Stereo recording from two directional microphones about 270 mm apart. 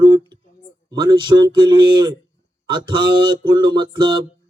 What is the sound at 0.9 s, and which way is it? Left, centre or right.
A man's voice, centre.